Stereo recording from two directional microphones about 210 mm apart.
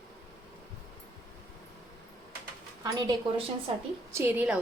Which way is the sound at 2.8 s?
20° right (ahead or behind).